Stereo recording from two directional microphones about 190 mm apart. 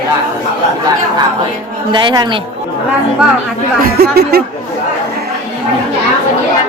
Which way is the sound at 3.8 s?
55° right (ahead or behind).